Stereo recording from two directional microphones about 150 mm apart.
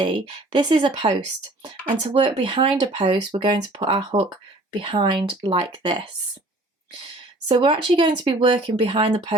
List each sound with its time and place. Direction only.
0.0 s speech: 30° right (ahead or behind)
7.4 s speech: 30° right (ahead or behind)